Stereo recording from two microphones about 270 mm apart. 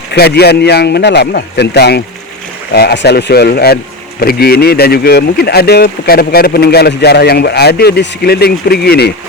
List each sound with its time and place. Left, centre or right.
0.1 s speech: left